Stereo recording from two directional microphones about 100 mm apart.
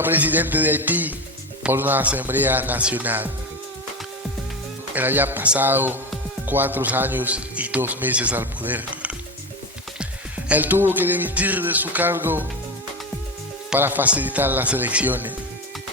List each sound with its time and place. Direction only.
0.0 s a man's voice: 20° right (ahead or behind)
4.9 s a man's voice: 20° right (ahead or behind)
10.0 s music: 15° right (ahead or behind)
13.7 s a man's voice: 20° right (ahead or behind)